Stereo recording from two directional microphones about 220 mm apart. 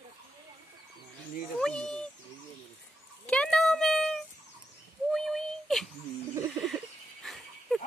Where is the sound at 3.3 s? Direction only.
5° left (ahead or behind).